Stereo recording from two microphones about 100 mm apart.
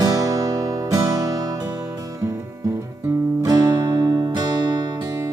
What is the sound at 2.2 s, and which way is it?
Music, 30° right (ahead or behind).